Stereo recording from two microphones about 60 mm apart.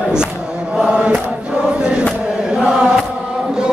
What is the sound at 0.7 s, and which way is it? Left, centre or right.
Chant, centre.